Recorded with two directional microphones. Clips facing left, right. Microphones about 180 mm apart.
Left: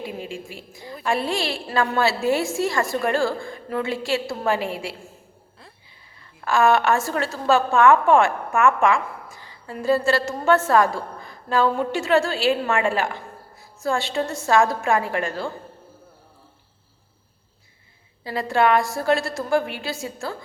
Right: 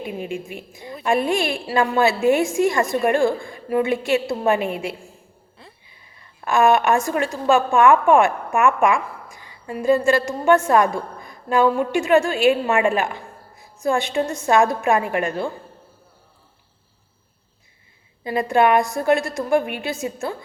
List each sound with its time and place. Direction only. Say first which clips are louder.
0.0 s a woman's voice: right 4 dB; 20° right (ahead or behind)
6.4 s a woman's voice: right 2 dB; 20° right (ahead or behind)
18.2 s a woman's voice: right 3 dB; 20° right (ahead or behind)